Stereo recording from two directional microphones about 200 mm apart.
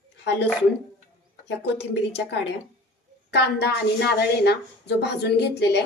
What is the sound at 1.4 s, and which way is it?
A woman's voice, 60° left (ahead or behind).